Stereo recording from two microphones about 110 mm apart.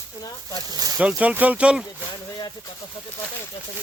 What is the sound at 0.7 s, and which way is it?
Speech, 35° right (ahead or behind).